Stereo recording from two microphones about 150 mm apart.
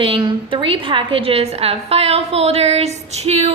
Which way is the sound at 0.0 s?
35° right (ahead or behind).